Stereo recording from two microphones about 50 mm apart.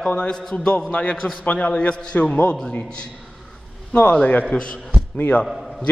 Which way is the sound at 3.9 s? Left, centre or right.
Left.